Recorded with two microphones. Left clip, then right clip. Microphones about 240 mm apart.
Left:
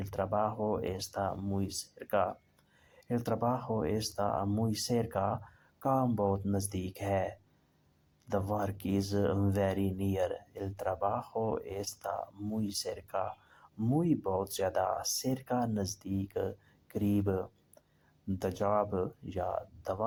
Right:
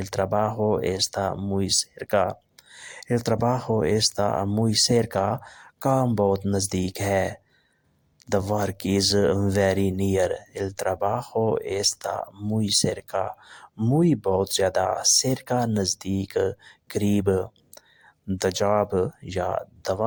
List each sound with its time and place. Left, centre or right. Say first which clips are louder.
0.0 s speech: right 8 dB; right